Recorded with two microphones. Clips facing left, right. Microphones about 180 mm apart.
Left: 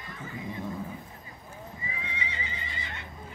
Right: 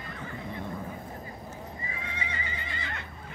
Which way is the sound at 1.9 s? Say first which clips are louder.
Even; 50° right (ahead or behind).